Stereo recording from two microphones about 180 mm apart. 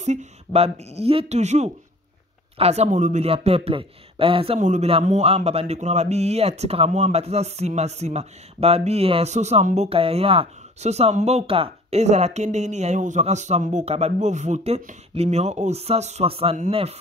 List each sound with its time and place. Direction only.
0.0 s a man's voice: 40° right (ahead or behind)